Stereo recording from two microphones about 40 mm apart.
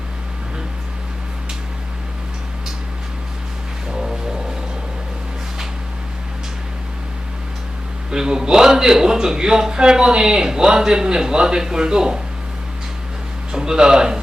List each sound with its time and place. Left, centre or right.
8.1 s a man's voice: centre
13.5 s speech: centre